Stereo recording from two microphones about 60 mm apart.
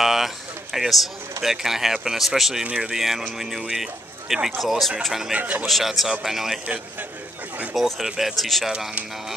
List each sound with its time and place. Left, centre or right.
0.0 s speech: centre
2.6 s speech: centre
5.4 s a man's voice: right
5.7 s speech: centre
7.7 s speech: centre